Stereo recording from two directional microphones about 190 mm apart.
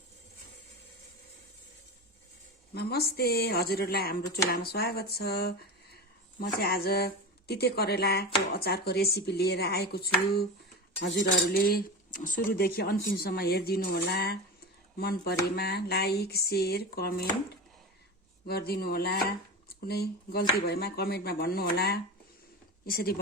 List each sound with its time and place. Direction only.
2.7 s speech: 55° left (ahead or behind)
11.0 s speech: 70° left (ahead or behind)
18.4 s speech: 55° left (ahead or behind)